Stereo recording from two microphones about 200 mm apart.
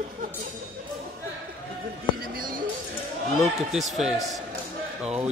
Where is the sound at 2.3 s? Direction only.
45° right (ahead or behind).